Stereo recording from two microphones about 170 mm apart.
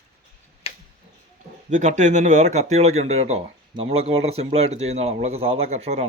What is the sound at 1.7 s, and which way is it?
Speech, 45° right (ahead or behind).